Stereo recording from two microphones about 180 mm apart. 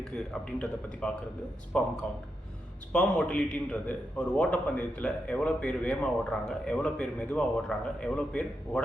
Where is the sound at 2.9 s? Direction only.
5° left (ahead or behind).